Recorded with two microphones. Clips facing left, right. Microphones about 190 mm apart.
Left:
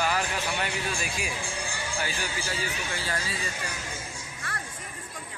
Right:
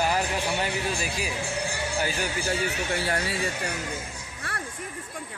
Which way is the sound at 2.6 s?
60° right (ahead or behind).